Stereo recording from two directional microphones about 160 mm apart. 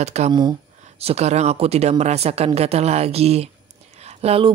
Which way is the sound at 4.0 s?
40° right (ahead or behind).